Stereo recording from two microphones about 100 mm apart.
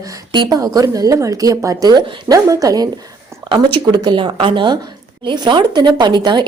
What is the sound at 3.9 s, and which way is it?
Speech, 50° right (ahead or behind).